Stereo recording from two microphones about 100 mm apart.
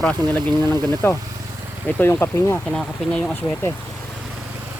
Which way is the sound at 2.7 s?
5° left (ahead or behind).